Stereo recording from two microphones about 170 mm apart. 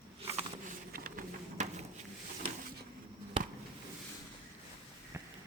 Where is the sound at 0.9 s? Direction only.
60° right (ahead or behind).